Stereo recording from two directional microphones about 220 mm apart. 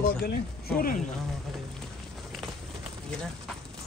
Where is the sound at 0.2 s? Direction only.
40° left (ahead or behind).